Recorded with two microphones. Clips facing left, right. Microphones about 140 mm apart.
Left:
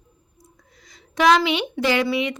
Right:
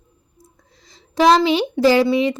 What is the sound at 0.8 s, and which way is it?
A woman's voice, 30° right (ahead or behind).